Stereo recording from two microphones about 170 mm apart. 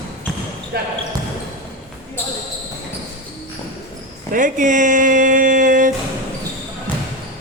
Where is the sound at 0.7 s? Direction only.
70° right (ahead or behind).